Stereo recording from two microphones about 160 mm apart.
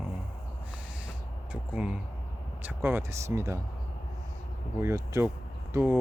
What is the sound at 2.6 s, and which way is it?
Speech, 15° right (ahead or behind).